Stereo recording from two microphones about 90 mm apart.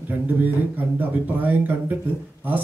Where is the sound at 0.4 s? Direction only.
20° right (ahead or behind).